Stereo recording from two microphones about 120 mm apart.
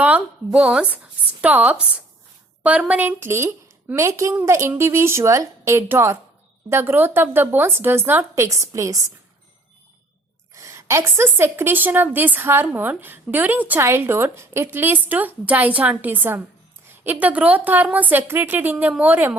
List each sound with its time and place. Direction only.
0.0 s a woman's voice: 10° right (ahead or behind)
10.5 s a woman's voice: 25° right (ahead or behind)